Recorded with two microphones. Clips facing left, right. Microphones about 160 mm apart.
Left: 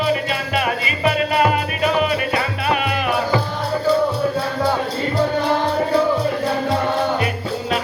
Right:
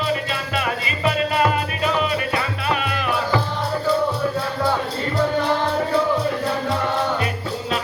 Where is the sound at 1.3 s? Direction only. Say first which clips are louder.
Left 2 dB; 15° left (ahead or behind).